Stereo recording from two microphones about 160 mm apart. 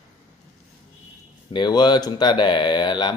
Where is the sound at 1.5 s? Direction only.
25° left (ahead or behind).